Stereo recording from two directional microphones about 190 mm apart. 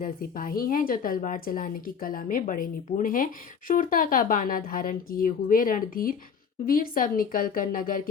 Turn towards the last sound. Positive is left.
turn(degrees=45)  # may be behind; listen again after turning